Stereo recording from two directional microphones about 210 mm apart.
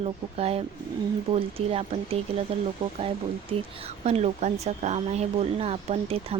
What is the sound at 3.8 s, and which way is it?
Speech, 30° right (ahead or behind).